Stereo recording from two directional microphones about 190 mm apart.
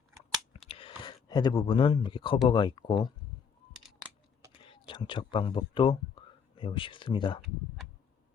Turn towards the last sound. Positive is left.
turn(degrees=25)  # may be behind; listen again after turning